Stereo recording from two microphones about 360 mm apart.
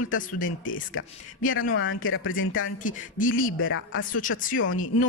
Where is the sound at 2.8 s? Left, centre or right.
Left.